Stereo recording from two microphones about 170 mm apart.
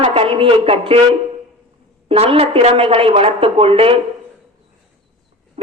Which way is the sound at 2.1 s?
35° right (ahead or behind).